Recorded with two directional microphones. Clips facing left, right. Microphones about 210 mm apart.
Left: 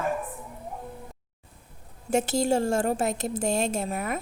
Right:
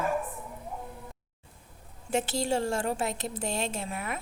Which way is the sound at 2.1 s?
45° left (ahead or behind).